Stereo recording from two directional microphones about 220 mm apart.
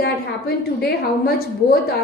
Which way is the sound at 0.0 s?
45° left (ahead or behind).